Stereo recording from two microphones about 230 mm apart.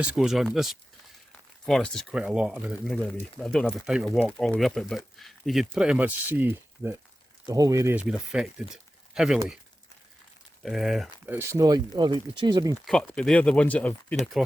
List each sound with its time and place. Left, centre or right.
0.0 s speech: centre
10.6 s speech: centre
11.3 s speech: centre
12.8 s speech: centre